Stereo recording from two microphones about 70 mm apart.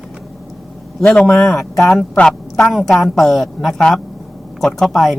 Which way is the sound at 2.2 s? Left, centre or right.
Centre.